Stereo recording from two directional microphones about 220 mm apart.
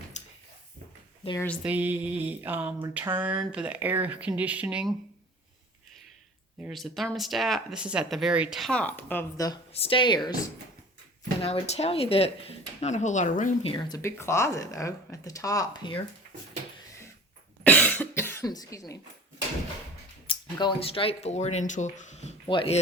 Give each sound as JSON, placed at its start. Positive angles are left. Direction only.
{"t": 0.1, "sound": "a sound", "side_deg": 30}
{"t": 1.2, "sound": "speech", "side_deg": 25}
{"t": 1.6, "sound": "speech", "side_deg": -10}
{"t": 6.6, "sound": "speech", "side_deg": 0}
{"t": 9.7, "sound": "speech", "side_deg": 25}
{"t": 11.3, "sound": "speech", "side_deg": 25}
{"t": 17.6, "sound": "cough", "side_deg": 5}
{"t": 20.2, "sound": "speech", "side_deg": 20}